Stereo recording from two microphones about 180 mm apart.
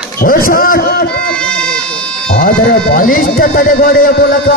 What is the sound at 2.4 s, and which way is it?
Speech, 50° left (ahead or behind).